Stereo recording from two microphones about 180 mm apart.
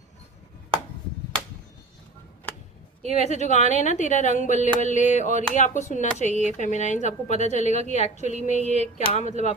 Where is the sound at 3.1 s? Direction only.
40° left (ahead or behind).